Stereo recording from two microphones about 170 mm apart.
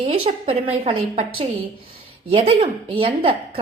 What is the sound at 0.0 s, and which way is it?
A woman's voice, 35° right (ahead or behind).